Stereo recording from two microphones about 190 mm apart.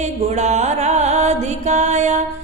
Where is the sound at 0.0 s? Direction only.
35° right (ahead or behind).